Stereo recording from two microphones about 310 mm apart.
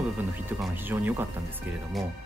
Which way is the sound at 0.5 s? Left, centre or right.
Centre.